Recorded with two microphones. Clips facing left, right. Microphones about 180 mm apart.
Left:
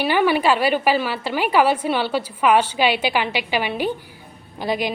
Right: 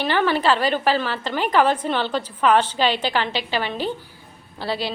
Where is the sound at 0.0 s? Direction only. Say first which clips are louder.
Left 2 dB; 10° left (ahead or behind).